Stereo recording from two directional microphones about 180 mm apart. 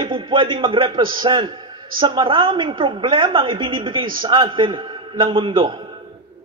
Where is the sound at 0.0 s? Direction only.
30° right (ahead or behind).